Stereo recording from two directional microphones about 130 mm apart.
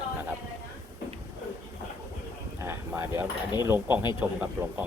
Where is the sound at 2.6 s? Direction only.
20° right (ahead or behind).